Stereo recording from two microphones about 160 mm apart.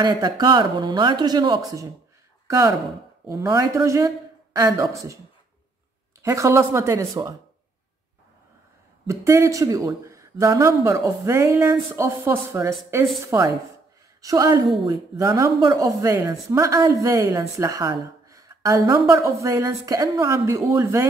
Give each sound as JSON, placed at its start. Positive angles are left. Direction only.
{"t": 0.0, "sound": "speech", "side_deg": -25}
{"t": 3.3, "sound": "speech", "side_deg": -20}
{"t": 6.2, "sound": "speech", "side_deg": -20}
{"t": 9.0, "sound": "speech", "side_deg": -20}